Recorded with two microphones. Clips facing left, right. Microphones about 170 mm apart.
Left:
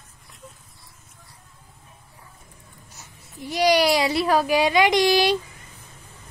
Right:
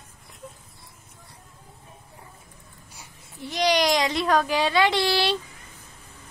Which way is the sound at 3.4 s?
10° left (ahead or behind).